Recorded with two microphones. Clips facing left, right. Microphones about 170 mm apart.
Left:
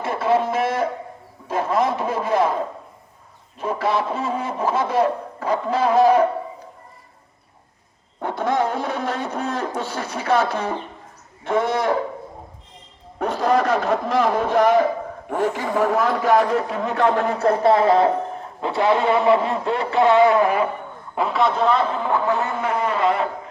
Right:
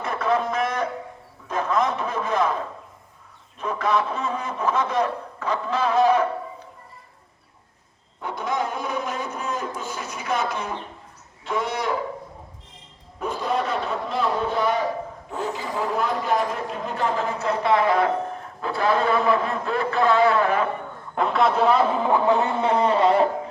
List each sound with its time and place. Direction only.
0.0 s a sound: 30° left (ahead or behind)
1.5 s a man's voice: 30° left (ahead or behind)
3.6 s a man's voice: 30° left (ahead or behind)
8.2 s speech: 60° left (ahead or behind)
13.1 s a man's voice: 75° left (ahead or behind); by 17.7 s 55° left (ahead or behind)
17.7 s a man's voice: 30° left (ahead or behind); by 20.7 s 15° left (ahead or behind)
21.2 s a man's voice: centre (ahead or behind)
22.1 s speech: 15° right (ahead or behind); by 23.3 s 35° right (ahead or behind)